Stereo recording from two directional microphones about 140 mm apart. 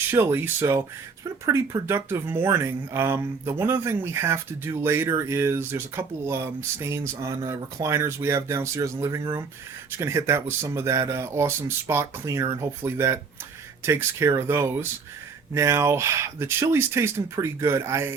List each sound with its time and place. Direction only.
0.1 s speech: 15° right (ahead or behind)